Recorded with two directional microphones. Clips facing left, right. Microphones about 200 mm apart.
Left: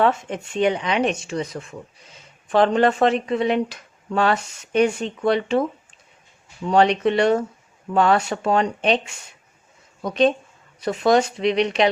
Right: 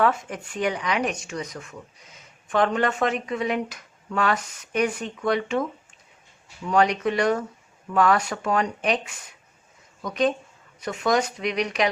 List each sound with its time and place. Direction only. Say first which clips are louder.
0.0 s speech: left 3 dB; 25° left (ahead or behind)
6.7 s speech: left 4 dB; 30° left (ahead or behind)